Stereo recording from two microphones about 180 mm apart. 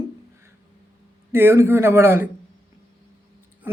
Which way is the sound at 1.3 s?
10° right (ahead or behind).